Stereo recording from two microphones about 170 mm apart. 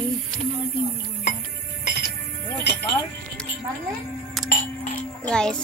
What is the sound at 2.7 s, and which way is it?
Music, 85° left.